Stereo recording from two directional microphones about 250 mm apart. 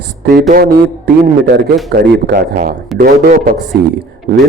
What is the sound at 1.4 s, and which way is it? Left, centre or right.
A man's voice, right.